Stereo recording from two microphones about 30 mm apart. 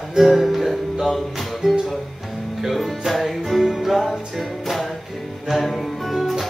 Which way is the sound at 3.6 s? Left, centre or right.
Centre.